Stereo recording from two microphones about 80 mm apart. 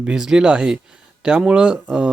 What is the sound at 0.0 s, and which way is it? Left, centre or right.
Speech, centre.